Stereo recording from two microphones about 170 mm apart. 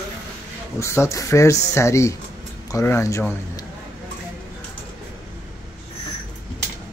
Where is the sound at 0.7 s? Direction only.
15° left (ahead or behind).